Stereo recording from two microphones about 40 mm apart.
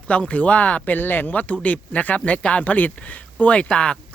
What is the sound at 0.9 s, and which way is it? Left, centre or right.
Speech, left.